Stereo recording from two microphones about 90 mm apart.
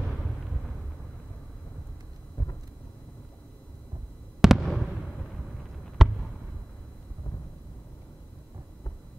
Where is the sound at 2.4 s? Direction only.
45° left (ahead or behind).